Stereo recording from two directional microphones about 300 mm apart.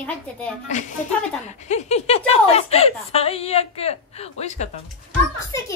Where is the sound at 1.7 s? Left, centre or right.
Left.